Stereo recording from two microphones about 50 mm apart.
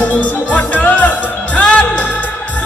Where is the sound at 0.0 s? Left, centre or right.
Left.